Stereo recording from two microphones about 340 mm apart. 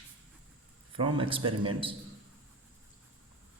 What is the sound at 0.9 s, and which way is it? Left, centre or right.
Speech, centre.